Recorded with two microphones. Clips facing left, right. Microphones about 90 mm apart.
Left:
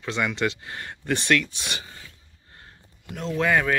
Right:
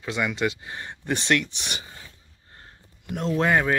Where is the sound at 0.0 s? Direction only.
15° right (ahead or behind).